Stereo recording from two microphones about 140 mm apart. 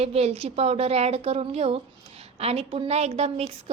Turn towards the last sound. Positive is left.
turn(degrees=-50)  # may be behind; listen again after turning